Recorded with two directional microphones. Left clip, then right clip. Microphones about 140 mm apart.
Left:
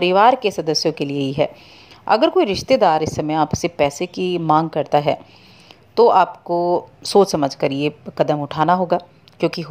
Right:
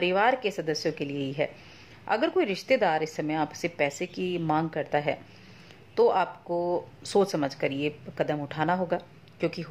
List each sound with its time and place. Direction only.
0.0 s a woman's voice: 40° left (ahead or behind)